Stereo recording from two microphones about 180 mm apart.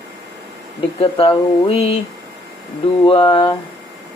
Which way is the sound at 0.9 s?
30° left (ahead or behind).